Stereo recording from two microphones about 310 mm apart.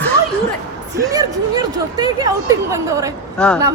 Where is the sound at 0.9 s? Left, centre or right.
Centre.